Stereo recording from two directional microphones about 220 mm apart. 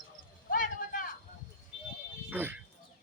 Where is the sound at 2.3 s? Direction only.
10° right (ahead or behind).